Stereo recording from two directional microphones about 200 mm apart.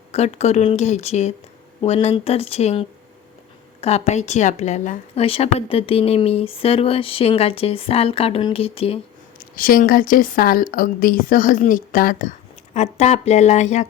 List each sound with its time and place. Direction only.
0.1 s speech: 30° left (ahead or behind)
9.6 s speech: 45° left (ahead or behind)